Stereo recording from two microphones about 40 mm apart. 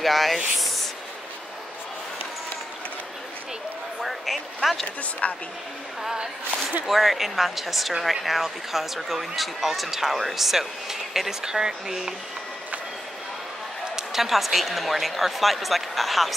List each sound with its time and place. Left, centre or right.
0.0 s speech: centre
0.6 s a sound: centre
4.0 s a sound: centre
5.2 s speech: left
6.9 s speech: centre
13.9 s speech: centre